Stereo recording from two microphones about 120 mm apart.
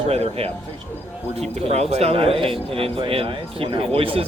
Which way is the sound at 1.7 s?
60° right (ahead or behind).